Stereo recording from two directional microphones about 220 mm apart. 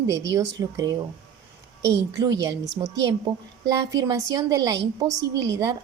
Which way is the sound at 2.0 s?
15° right (ahead or behind).